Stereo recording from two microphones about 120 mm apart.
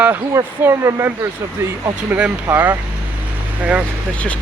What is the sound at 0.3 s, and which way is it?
Speech, 20° right (ahead or behind).